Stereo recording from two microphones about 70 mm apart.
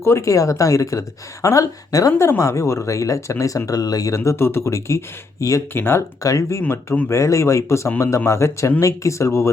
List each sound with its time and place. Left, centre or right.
0.0 s speech: left
3.7 s speech: left
4.1 s speech: left
5.7 s speech: left
6.2 s speech: left